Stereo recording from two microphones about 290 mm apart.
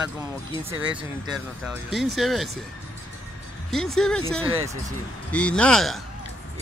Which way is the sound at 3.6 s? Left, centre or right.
Centre.